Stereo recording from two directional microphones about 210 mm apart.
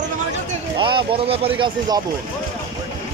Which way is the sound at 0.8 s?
25° right (ahead or behind).